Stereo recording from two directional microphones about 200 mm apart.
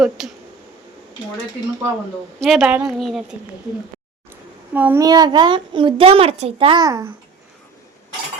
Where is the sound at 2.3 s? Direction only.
Centre (ahead or behind).